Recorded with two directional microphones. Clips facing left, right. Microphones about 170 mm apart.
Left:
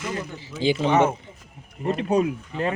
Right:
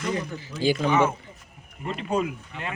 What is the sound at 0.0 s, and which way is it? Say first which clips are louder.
Speech: right 2 dB; 5° left (ahead or behind).